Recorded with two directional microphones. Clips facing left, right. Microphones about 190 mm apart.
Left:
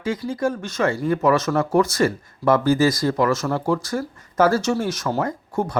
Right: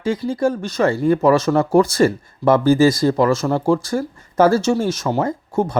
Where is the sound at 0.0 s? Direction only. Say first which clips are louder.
Right 4 dB; 30° right (ahead or behind).